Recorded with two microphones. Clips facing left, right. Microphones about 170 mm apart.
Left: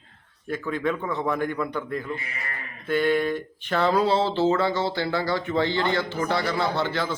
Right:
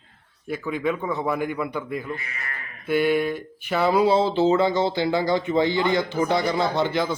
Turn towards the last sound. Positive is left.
turn(degrees=-15)  # may be behind; listen again after turning